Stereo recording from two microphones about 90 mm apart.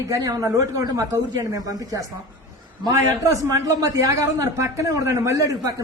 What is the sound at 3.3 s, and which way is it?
A man's voice, 40° right (ahead or behind).